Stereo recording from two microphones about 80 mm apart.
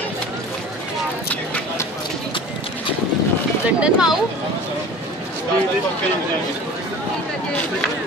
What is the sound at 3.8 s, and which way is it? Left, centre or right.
Speech, centre.